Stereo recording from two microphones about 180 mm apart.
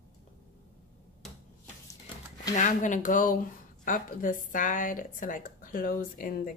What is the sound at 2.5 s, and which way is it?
Speech, 45° left (ahead or behind).